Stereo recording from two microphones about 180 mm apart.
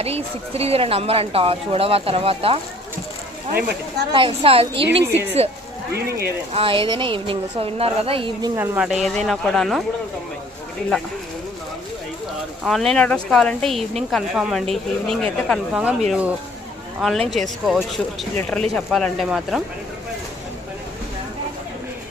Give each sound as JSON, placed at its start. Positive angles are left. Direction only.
{"t": 0.0, "sound": "speech", "side_deg": -35}
{"t": 4.1, "sound": "a woman's voice", "side_deg": -30}
{"t": 5.9, "sound": "speech", "side_deg": -60}
{"t": 6.5, "sound": "a woman's voice", "side_deg": -30}
{"t": 12.6, "sound": "speech", "side_deg": 0}